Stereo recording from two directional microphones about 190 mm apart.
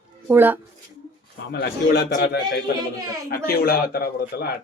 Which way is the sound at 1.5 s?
60° left (ahead or behind).